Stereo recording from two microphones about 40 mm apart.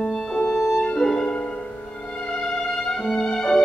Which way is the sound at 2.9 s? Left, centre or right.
Centre.